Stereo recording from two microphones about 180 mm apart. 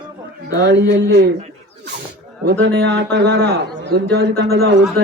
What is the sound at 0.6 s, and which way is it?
Speech, 75° right (ahead or behind).